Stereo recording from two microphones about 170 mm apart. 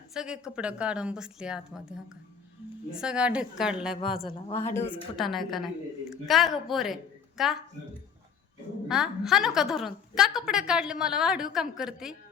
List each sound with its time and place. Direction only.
0.1 s a woman's voice: 5° right (ahead or behind)
4.3 s speech: 30° left (ahead or behind)
4.6 s a woman's voice: 15° left (ahead or behind)
5.1 s a woman's voice: centre (ahead or behind)
8.9 s a woman's voice: 5° right (ahead or behind)